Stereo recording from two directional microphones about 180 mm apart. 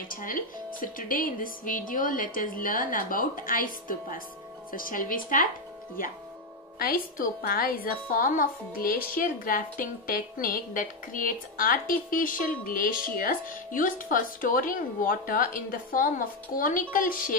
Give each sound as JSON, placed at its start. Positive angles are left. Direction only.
{"t": 0.1, "sound": "a woman's voice", "side_deg": 50}
{"t": 6.8, "sound": "a woman's voice", "side_deg": 55}